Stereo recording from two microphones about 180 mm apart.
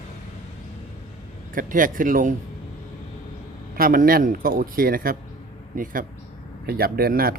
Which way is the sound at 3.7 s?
55° right (ahead or behind).